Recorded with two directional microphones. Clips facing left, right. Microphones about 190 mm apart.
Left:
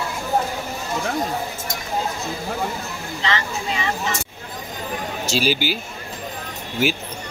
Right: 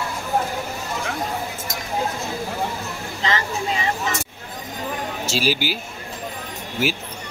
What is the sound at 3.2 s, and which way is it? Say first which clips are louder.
Speech: right 1 dB; 40° right (ahead or behind).